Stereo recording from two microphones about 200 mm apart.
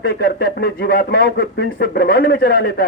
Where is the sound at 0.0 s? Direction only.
50° left (ahead or behind).